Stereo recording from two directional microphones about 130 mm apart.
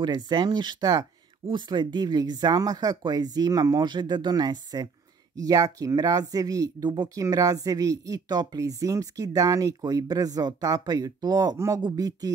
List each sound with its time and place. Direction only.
0.0 s speech: 35° right (ahead or behind)